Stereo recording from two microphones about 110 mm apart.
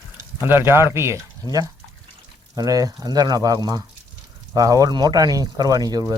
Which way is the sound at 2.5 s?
35° right (ahead or behind).